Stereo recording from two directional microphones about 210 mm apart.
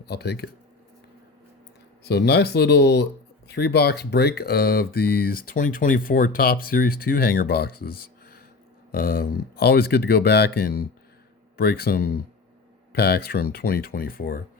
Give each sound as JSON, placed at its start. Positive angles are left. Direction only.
{"t": 0.0, "sound": "speech", "side_deg": 50}
{"t": 2.0, "sound": "speech", "side_deg": 50}